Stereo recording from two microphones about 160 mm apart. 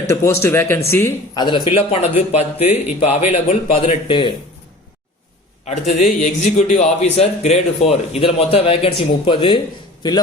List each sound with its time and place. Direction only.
0.1 s speech: 15° left (ahead or behind)
1.4 s speech: 30° left (ahead or behind)
6.0 s speech: 50° left (ahead or behind); by 9.6 s 30° left (ahead or behind)